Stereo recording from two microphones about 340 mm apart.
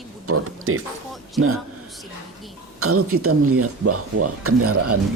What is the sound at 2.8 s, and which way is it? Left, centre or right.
Speech, right.